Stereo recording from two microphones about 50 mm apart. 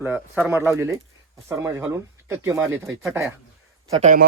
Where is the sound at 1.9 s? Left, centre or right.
Right.